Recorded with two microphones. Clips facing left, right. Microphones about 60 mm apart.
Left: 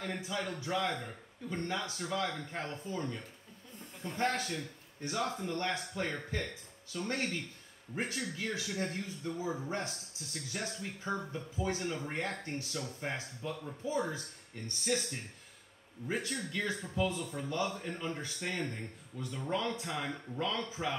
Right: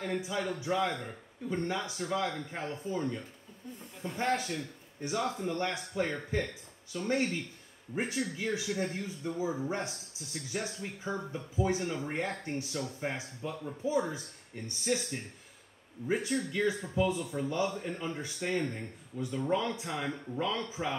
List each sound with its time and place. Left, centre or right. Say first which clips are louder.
0.0 s speech: right 4 dB; centre